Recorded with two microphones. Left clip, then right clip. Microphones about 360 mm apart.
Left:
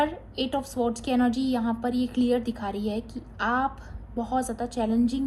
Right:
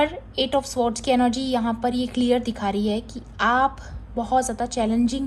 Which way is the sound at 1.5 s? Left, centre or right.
Right.